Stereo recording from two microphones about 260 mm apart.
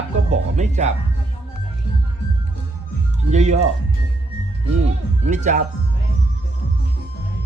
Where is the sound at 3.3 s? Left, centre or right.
Right.